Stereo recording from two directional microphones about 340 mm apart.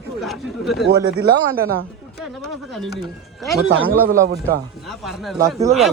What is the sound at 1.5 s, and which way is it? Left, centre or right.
Speech, right.